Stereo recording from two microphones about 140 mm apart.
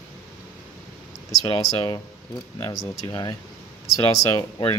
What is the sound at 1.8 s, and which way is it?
Speech, 30° left (ahead or behind).